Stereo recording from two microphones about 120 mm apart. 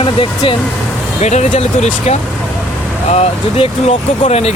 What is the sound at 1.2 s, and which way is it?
Speech, 70° left (ahead or behind).